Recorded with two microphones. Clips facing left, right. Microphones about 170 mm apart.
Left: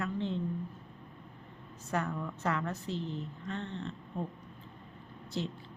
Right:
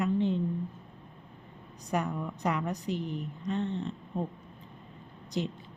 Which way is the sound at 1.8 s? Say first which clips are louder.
Right 3 dB; 15° right (ahead or behind).